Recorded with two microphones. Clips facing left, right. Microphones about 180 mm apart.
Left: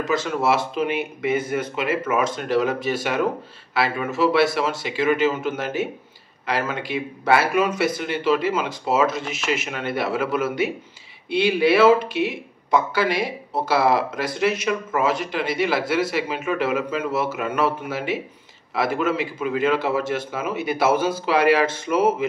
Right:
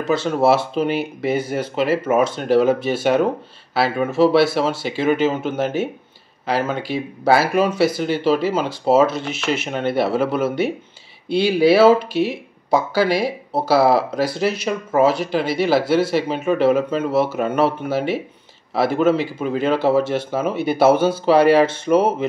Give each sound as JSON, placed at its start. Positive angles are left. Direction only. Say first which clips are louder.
{"t": 0.0, "sound": "speech", "louder": "right 5 dB", "side_deg": -30}
{"t": 3.7, "sound": "speech", "louder": "right 5 dB", "side_deg": -30}